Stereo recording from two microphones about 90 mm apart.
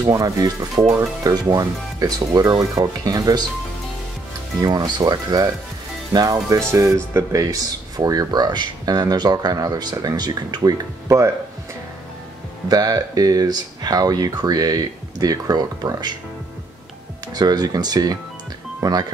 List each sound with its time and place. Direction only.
0.1 s speech: 40° right (ahead or behind)
4.6 s speech: 50° right (ahead or behind)
6.7 s speech: 35° right (ahead or behind)
12.6 s speech: 45° right (ahead or behind)
17.3 s speech: 45° right (ahead or behind)